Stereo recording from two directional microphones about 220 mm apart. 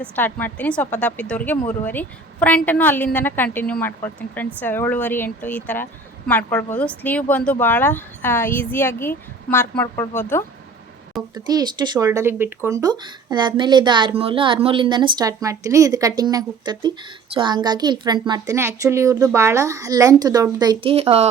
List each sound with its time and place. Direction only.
0.0 s a woman's voice: 10° left (ahead or behind)
11.3 s a woman's voice: 20° right (ahead or behind)